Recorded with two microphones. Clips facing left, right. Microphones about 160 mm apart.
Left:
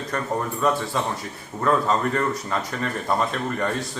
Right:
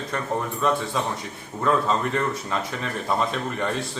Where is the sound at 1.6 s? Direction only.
Centre (ahead or behind).